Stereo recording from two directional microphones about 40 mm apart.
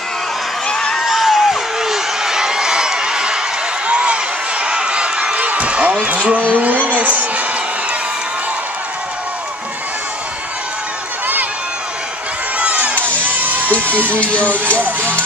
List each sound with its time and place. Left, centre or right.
0.7 s a sound: centre
1.0 s a sound: centre; by 7.4 s right
12.5 s crowd: right
13.3 s crowd: right
14.1 s speech: left
14.8 s speech: right